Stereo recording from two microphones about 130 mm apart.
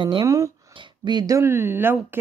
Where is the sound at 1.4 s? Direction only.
20° right (ahead or behind).